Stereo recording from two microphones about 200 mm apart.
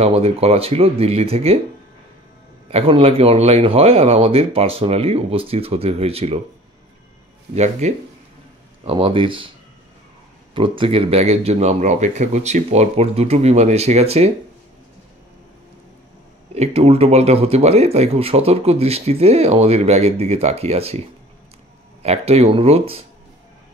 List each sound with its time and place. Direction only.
0.0 s speech: 30° right (ahead or behind)
2.7 s speech: 30° right (ahead or behind)
7.5 s speech: 35° right (ahead or behind)
10.5 s speech: 25° right (ahead or behind)
16.5 s speech: 30° right (ahead or behind)
22.0 s speech: 30° right (ahead or behind)